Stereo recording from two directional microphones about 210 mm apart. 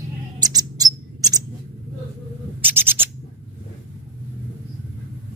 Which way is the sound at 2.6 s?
10° right (ahead or behind).